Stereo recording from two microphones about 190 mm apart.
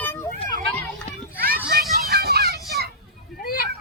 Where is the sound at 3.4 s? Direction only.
50° left (ahead or behind).